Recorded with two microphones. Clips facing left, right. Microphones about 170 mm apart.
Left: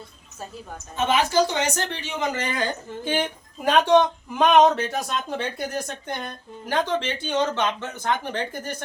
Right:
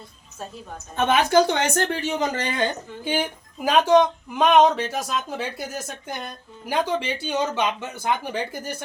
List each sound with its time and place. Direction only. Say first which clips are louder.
0.9 s speech: right 2 dB; 60° right (ahead or behind); by 2.6 s 30° right (ahead or behind)
3.0 s speech: even; 10° right (ahead or behind)